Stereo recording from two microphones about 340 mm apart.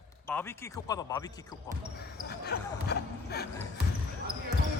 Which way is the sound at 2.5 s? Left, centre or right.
Left.